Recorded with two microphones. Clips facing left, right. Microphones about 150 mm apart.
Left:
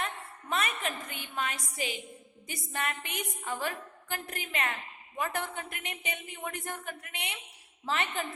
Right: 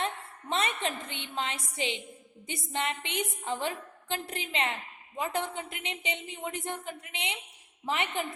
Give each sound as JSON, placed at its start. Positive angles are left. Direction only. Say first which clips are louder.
{"t": 0.0, "sound": "a woman's voice", "louder": "right 3 dB", "side_deg": -25}